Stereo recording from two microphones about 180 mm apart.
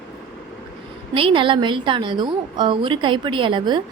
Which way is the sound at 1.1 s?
30° right (ahead or behind).